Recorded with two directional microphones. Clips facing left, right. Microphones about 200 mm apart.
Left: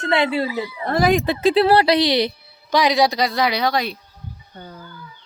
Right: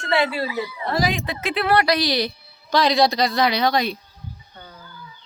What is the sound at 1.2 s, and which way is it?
Speech, 30° left (ahead or behind).